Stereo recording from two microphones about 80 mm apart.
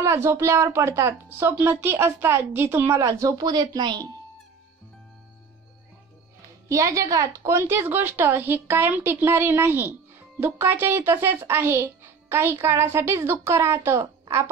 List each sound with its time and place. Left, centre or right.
0.0 s speech: right
3.0 s speech: right
6.7 s a woman's voice: right